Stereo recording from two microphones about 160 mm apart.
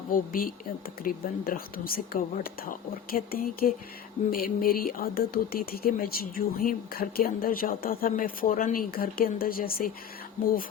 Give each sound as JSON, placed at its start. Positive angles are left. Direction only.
{"t": 0.1, "sound": "speech", "side_deg": 65}